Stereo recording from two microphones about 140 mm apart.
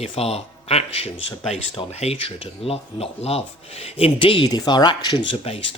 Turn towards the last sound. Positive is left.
turn(degrees=40)  # may be behind; listen again after turning